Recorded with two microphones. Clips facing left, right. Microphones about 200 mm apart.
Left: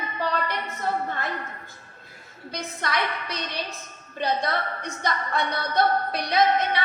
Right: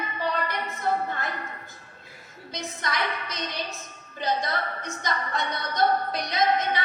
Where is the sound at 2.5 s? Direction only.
60° left (ahead or behind).